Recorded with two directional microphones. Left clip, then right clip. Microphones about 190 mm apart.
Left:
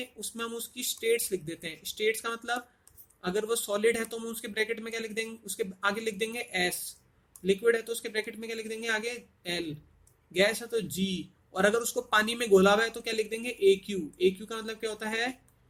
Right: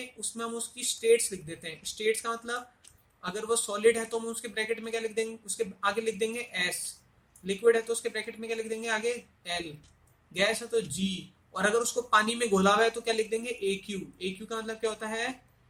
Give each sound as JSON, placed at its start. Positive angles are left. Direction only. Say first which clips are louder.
{"t": 0.3, "sound": "speech", "louder": "even", "side_deg": 50}